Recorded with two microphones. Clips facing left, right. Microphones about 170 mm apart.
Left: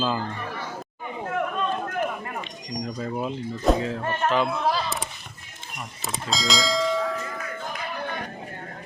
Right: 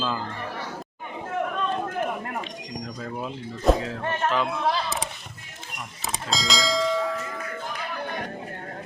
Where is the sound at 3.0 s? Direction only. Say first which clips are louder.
Left 5 dB; 5° left (ahead or behind).